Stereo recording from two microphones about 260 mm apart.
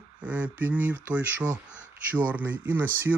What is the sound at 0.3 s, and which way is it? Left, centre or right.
Speech, centre.